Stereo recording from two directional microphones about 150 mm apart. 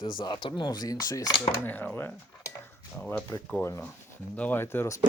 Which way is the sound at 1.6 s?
10° left (ahead or behind).